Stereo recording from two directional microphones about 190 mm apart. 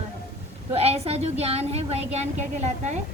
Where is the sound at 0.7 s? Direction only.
30° right (ahead or behind).